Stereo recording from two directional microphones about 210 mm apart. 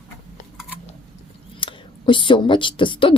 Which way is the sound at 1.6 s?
25° left (ahead or behind).